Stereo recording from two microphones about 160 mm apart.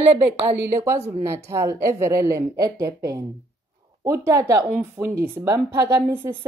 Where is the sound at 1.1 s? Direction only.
20° right (ahead or behind).